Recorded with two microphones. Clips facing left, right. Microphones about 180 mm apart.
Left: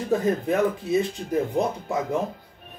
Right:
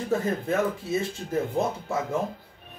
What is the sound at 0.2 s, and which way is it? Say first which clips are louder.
Speech: left 4 dB; 15° left (ahead or behind).